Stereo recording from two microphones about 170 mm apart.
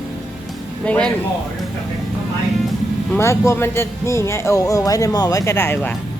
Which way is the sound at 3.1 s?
15° left (ahead or behind).